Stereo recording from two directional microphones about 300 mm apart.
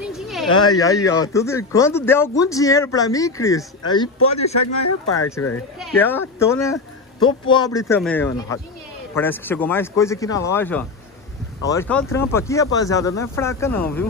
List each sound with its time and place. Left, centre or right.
0.1 s a sound: centre
0.5 s speech: centre
4.8 s speech: left
5.8 s speech: centre